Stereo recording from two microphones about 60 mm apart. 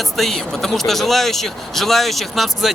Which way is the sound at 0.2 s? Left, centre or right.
Centre.